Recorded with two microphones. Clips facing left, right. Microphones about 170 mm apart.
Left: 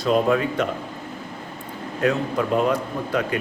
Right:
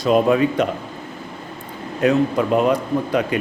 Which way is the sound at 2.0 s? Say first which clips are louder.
Right 5 dB; 20° right (ahead or behind).